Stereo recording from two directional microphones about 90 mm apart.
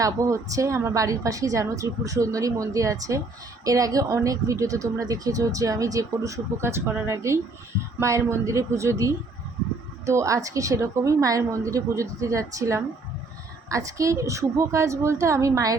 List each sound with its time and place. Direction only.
0.0 s speech: 35° right (ahead or behind)